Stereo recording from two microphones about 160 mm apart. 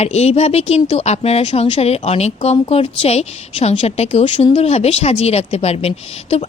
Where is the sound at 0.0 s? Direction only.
40° left (ahead or behind).